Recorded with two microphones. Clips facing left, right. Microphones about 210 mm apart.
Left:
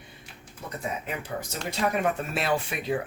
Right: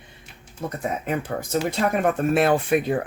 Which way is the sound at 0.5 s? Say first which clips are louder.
Right 6 dB; 50° right (ahead or behind).